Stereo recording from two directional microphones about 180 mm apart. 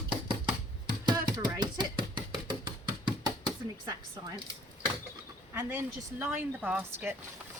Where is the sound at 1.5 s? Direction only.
25° right (ahead or behind).